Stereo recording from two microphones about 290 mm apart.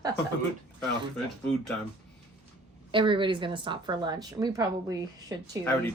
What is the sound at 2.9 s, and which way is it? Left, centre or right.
Speech, centre.